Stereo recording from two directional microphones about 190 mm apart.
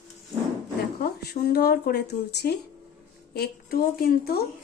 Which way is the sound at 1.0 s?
55° left (ahead or behind).